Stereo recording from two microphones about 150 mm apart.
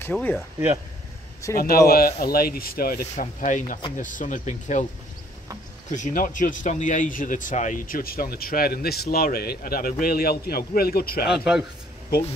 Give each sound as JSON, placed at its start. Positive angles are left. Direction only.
{"t": 0.0, "sound": "speech", "side_deg": 10}
{"t": 1.4, "sound": "a man's voice", "side_deg": 20}
{"t": 1.9, "sound": "speech", "side_deg": 85}
{"t": 5.9, "sound": "speech", "side_deg": 55}
{"t": 11.2, "sound": "a man's voice", "side_deg": -5}